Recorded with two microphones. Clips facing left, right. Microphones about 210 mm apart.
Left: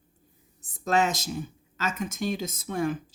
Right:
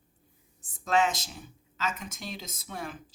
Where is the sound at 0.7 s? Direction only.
40° left (ahead or behind).